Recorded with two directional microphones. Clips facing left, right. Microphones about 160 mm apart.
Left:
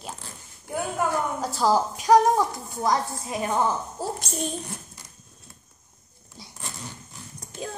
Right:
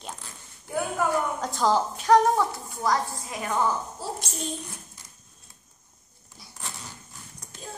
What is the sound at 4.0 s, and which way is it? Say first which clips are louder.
Speech: left 4 dB; 45° left (ahead or behind).